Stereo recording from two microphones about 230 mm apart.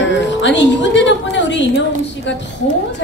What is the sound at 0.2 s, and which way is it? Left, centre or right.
A woman's voice, left.